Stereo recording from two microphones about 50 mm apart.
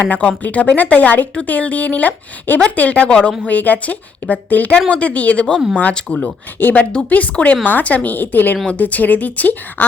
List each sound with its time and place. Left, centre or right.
0.1 s a woman's voice: left
3.4 s a woman's voice: left; by 6.3 s centre
6.6 s a woman's voice: left
7.1 s a woman's voice: left